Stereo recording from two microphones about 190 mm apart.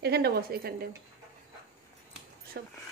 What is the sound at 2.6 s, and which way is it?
Speech, 55° right (ahead or behind).